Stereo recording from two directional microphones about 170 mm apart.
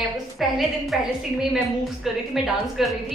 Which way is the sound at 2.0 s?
Centre (ahead or behind).